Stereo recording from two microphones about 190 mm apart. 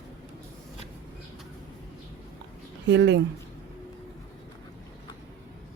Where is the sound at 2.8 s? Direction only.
70° right (ahead or behind).